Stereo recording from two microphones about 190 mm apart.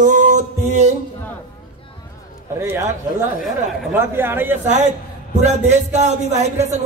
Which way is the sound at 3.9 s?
10° right (ahead or behind).